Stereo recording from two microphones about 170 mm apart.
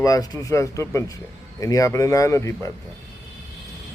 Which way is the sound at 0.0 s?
20° left (ahead or behind).